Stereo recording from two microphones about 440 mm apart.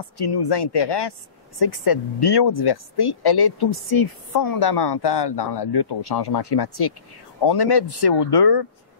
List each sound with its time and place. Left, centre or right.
0.0 s speech: left